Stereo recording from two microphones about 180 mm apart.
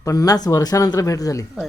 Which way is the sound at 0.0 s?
20° left (ahead or behind).